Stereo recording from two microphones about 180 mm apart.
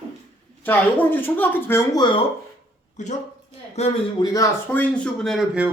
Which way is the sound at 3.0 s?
40° left (ahead or behind).